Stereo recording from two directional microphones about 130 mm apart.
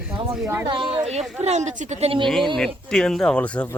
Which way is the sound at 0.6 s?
40° right (ahead or behind).